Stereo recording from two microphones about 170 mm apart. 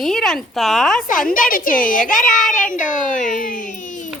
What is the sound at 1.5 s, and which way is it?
A woman's voice, 55° left (ahead or behind).